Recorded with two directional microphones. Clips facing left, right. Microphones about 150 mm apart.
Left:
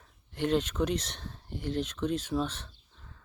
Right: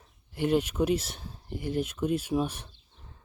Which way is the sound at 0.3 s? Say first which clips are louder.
Right 2 dB; 10° right (ahead or behind).